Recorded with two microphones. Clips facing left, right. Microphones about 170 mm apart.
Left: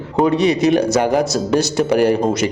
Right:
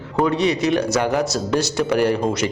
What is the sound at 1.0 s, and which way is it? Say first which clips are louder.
Speech: left 4 dB; 40° left (ahead or behind).